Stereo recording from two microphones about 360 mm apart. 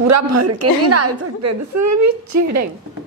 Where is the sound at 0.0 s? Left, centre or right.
Right.